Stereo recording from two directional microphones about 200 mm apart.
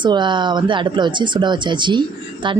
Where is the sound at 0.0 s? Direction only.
25° right (ahead or behind).